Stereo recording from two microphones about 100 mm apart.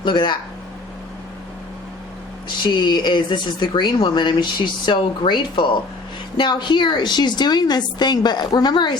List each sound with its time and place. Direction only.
0.0 s speech: 50° left (ahead or behind)
2.6 s speech: 50° left (ahead or behind)